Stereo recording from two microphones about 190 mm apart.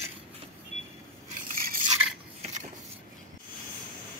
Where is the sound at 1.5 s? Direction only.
50° right (ahead or behind).